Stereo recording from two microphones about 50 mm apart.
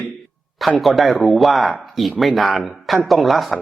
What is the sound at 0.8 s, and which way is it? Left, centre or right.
Speech, centre.